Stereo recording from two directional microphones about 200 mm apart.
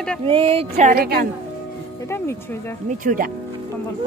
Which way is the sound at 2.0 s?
15° left (ahead or behind).